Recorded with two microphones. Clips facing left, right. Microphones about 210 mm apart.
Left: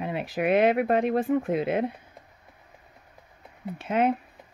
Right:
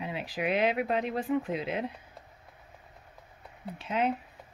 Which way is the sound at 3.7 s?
55° left (ahead or behind).